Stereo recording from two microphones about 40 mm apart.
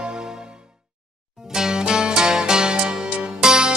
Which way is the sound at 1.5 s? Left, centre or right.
Centre.